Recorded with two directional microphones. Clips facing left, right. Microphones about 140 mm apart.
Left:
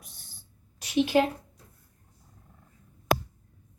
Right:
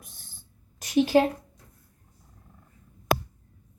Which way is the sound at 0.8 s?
40° right (ahead or behind).